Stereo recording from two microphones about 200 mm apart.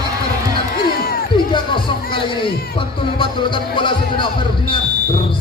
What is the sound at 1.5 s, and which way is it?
Music, 25° left (ahead or behind).